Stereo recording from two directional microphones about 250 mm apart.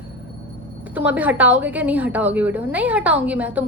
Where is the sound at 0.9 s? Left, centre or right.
Centre.